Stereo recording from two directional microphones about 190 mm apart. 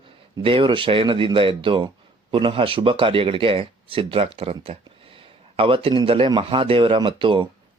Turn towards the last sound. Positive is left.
turn(degrees=-25)  # may be behind; listen again after turning